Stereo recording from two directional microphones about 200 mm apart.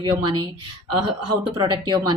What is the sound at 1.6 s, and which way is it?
Speech, 25° right (ahead or behind).